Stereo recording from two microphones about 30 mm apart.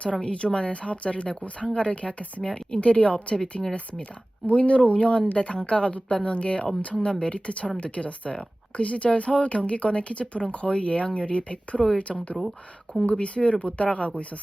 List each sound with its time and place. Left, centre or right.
0.3 s speech: left
2.4 s speech: left
3.6 s speech: centre
4.4 s speech: left
13.1 s speech: left